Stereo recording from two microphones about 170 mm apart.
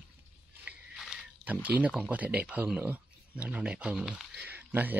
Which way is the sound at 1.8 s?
10° right (ahead or behind).